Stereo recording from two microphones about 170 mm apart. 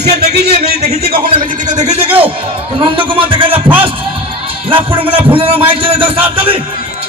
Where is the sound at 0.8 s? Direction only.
35° right (ahead or behind).